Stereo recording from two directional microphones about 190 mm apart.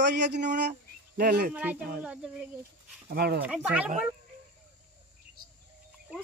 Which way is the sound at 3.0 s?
55° right (ahead or behind).